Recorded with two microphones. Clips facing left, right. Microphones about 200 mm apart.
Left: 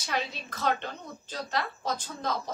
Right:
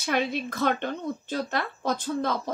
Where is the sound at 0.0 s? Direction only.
60° right (ahead or behind).